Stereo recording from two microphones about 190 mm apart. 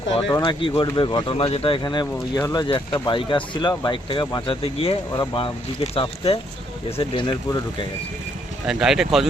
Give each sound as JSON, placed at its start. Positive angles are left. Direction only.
{"t": 0.1, "sound": "speech", "side_deg": 30}
{"t": 8.6, "sound": "speech", "side_deg": -5}